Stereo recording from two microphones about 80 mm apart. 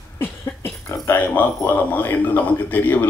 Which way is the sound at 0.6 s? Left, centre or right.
Left.